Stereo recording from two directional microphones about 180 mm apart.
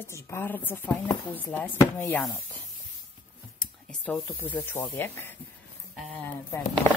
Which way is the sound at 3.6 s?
5° left (ahead or behind).